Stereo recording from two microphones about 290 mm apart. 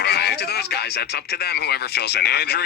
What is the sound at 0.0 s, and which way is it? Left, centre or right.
Speech, left.